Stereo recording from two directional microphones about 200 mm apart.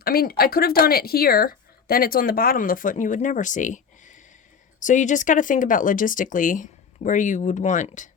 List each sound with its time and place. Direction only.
0.0 s speech: 50° left (ahead or behind)